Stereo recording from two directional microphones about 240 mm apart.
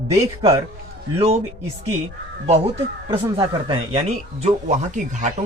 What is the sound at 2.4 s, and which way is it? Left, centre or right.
Speech, right.